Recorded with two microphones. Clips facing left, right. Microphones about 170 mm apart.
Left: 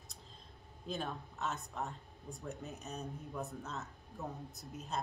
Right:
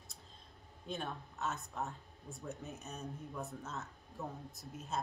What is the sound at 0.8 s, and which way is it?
Speech, centre (ahead or behind).